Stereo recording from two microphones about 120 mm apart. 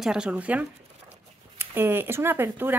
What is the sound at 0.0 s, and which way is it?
Speech, 5° right (ahead or behind).